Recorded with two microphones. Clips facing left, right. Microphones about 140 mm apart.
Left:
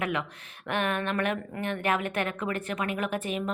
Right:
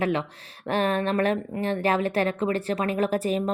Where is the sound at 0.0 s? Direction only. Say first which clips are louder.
Right 5 dB; 30° right (ahead or behind).